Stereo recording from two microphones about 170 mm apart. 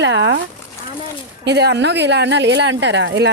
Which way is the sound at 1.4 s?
80° right.